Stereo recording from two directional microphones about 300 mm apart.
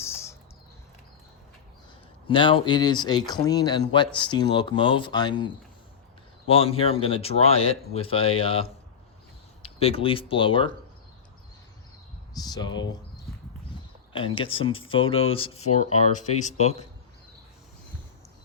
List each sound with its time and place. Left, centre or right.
0.0 s bird: centre
2.2 s speech: centre
6.5 s speech: centre
12.3 s speech: centre
14.1 s speech: centre